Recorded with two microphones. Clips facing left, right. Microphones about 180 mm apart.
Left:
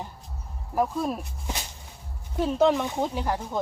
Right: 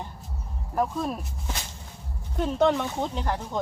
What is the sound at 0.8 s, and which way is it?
Speech, 5° left (ahead or behind).